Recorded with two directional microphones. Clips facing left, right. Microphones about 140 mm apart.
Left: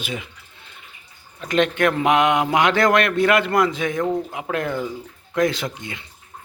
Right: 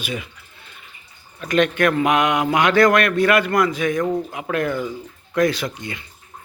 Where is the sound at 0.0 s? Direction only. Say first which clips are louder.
Right 2 dB; 20° left (ahead or behind).